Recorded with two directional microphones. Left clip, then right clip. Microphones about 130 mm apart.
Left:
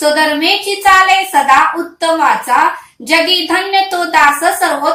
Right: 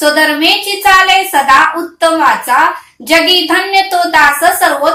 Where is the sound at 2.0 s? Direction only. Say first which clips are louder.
Right 2 dB; 20° right (ahead or behind).